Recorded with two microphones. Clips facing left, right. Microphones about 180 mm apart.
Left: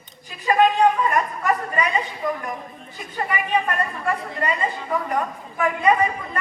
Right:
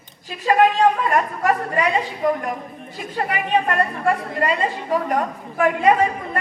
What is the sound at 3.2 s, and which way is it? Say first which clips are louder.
A woman's voice: right 2 dB; 70° right (ahead or behind).